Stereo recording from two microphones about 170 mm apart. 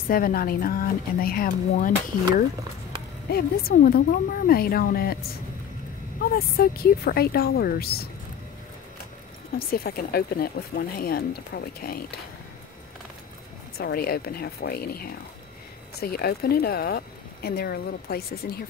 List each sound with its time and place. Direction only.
0.1 s speech: 60° left (ahead or behind)
3.3 s speech: 65° left (ahead or behind)
6.3 s speech: 65° left (ahead or behind)
9.6 s speech: 60° left (ahead or behind)
13.7 s speech: 65° left (ahead or behind)